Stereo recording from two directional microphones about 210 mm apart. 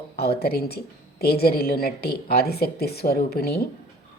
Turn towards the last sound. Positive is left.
turn(degrees=45)  # may be behind; listen again after turning